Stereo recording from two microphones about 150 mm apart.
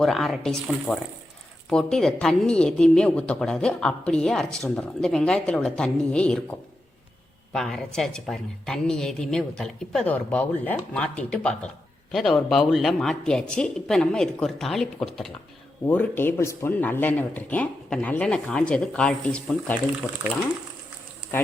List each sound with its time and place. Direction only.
0.0 s a woman's voice: centre (ahead or behind)